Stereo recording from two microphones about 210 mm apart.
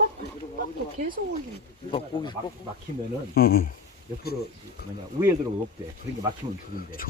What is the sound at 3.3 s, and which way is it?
Speech, 45° left (ahead or behind).